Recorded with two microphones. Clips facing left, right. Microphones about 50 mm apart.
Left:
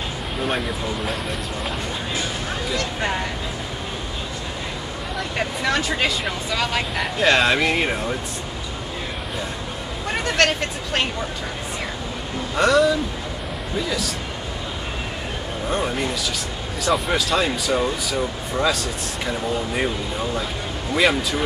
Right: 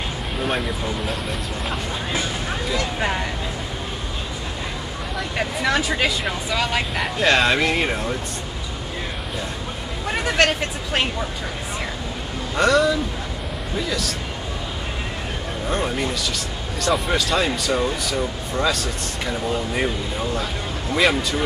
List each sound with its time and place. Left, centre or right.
0.4 s speech: centre
2.7 s speech: centre
5.1 s speech: centre
10.0 s speech: centre
12.5 s speech: centre
15.7 s speech: centre
20.9 s speech: centre